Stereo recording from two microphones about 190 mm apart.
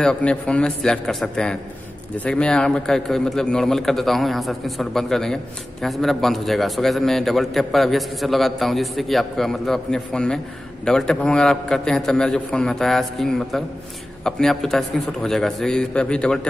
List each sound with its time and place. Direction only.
0.0 s a man's voice: 5° left (ahead or behind)